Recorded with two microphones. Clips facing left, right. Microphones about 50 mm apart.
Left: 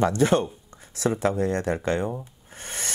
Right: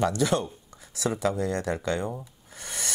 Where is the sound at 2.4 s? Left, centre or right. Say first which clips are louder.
Left 1 dB; left.